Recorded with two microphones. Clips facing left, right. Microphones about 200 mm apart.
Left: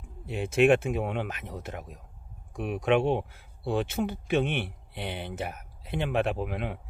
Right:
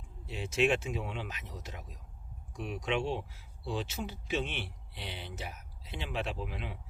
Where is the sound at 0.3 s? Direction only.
55° left (ahead or behind).